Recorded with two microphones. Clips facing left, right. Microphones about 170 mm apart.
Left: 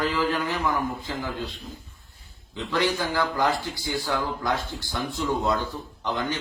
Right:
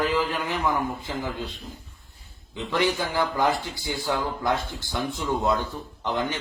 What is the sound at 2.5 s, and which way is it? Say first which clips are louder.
A man's voice: right 1 dB; 20° right (ahead or behind).